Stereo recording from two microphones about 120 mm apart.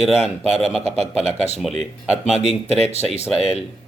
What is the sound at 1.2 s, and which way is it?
Speech, 65° left (ahead or behind).